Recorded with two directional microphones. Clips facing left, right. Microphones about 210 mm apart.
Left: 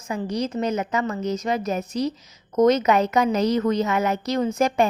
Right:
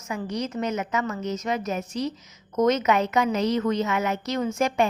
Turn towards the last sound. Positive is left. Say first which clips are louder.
# left 3 dB
turn(degrees=35)  # may be behind; listen again after turning